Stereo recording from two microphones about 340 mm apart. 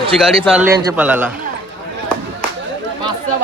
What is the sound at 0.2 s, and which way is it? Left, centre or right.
A man's voice, centre.